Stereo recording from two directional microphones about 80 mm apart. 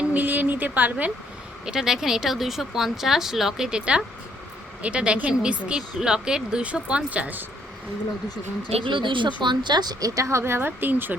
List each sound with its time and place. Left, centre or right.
0.1 s a woman's voice: right
1.6 s speech: centre
8.8 s speech: right